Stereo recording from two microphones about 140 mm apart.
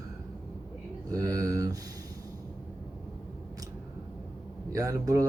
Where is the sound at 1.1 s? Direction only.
25° right (ahead or behind).